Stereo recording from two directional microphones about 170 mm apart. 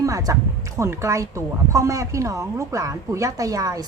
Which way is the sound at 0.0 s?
20° right (ahead or behind).